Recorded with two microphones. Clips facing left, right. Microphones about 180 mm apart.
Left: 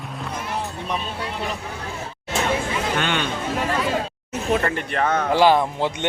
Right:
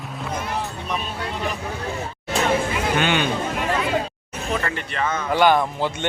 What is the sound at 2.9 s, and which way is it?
Speech, 5° right (ahead or behind).